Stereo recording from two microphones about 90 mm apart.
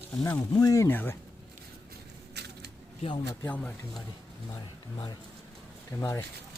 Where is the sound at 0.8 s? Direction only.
25° left (ahead or behind).